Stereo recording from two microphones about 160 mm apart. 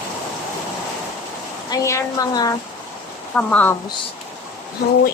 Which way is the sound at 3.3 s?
5° left (ahead or behind).